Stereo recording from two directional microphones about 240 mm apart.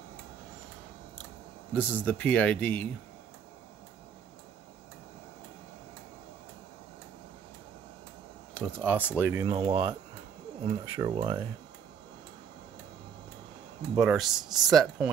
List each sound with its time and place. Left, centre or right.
1.9 s speech: centre
8.5 s speech: centre
9.0 s speech: centre
9.5 s speech: right
14.0 s speech: centre